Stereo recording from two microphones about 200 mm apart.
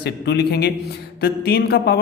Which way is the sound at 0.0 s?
55° left (ahead or behind).